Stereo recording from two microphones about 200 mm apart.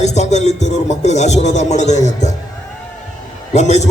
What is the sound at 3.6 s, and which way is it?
Speech, 35° left (ahead or behind).